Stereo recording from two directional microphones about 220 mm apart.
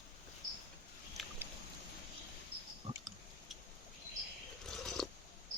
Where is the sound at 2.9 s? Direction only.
30° right (ahead or behind).